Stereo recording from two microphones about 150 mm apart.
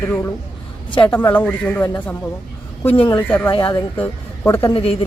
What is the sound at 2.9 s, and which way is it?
Speech, 30° left (ahead or behind).